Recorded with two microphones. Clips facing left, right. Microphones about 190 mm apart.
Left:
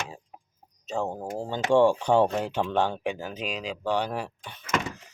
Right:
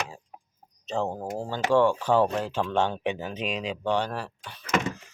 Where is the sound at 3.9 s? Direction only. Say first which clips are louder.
Left 2 dB; 15° left (ahead or behind).